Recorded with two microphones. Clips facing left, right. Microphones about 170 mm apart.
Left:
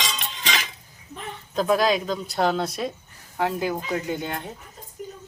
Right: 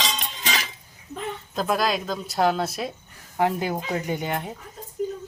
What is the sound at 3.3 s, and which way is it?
Speech, 15° right (ahead or behind).